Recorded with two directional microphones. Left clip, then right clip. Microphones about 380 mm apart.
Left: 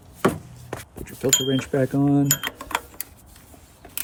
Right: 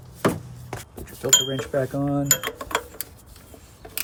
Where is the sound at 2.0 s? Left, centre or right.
Left.